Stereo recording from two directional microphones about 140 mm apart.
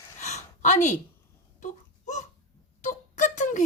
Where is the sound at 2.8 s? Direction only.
60° left (ahead or behind).